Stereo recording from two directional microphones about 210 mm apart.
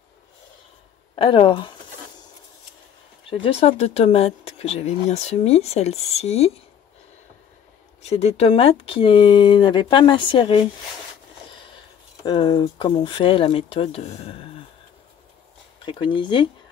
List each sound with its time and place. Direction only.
1.1 s speech: 25° left (ahead or behind)
3.4 s speech: 30° left (ahead or behind)
8.0 s speech: 30° left (ahead or behind)
12.2 s speech: 20° left (ahead or behind)
15.8 s speech: 25° left (ahead or behind)